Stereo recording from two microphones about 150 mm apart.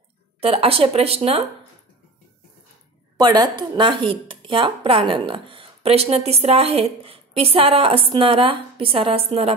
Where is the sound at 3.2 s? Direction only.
30° right (ahead or behind).